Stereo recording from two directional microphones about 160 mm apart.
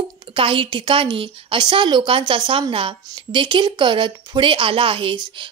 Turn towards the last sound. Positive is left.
turn(degrees=-30)  # may be behind; listen again after turning